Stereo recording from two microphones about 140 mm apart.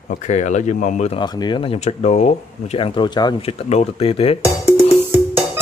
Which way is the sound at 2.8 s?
35° left (ahead or behind).